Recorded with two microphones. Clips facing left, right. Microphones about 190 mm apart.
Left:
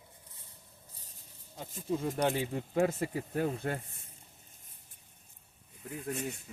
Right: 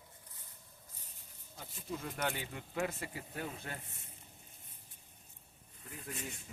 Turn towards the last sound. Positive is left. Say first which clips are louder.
# left 8 dB
turn(degrees=55)  # may be behind; listen again after turning